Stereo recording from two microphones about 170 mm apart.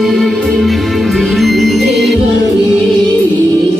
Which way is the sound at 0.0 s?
Centre (ahead or behind).